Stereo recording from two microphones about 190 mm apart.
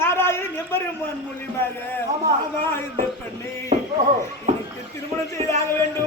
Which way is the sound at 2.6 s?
10° left (ahead or behind).